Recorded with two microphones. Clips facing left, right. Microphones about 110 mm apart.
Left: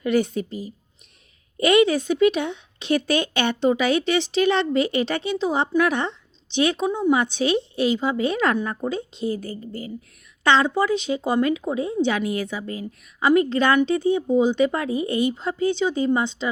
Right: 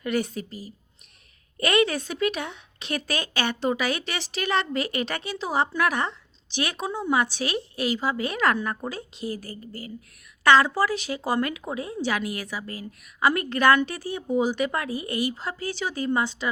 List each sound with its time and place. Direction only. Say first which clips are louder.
0.0 s speech: left 6 dB; 25° left (ahead or behind)
3.1 s speech: left 7 dB; 35° right (ahead or behind)
3.4 s speech: left 3 dB; 25° left (ahead or behind)